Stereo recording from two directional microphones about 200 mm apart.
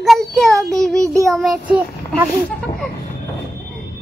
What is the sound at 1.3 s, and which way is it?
Speech, centre (ahead or behind).